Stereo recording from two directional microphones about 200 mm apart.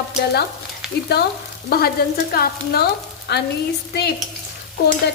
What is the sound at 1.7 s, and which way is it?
A woman's voice, 50° left (ahead or behind).